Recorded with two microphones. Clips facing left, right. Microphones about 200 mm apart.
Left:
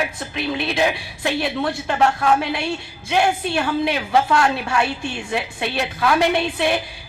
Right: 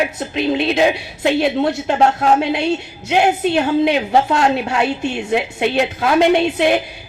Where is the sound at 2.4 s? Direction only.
20° right (ahead or behind).